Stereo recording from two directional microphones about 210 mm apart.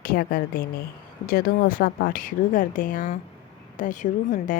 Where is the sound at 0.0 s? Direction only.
45° left (ahead or behind).